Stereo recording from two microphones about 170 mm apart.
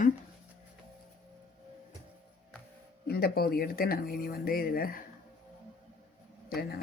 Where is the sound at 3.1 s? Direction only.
65° left (ahead or behind).